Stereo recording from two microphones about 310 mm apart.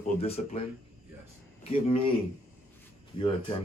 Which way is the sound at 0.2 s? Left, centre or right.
Centre.